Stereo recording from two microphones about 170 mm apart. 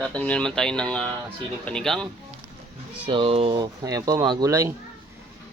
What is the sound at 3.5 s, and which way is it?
Speech, 20° right (ahead or behind).